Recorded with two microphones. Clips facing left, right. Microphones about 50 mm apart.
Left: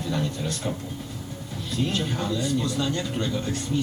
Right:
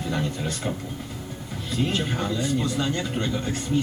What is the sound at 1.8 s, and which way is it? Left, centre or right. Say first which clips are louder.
A man's voice: right 1 dB; right.